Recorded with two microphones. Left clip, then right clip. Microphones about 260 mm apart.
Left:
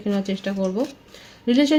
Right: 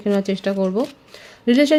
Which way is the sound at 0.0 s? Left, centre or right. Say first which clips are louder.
Right 5 dB; right.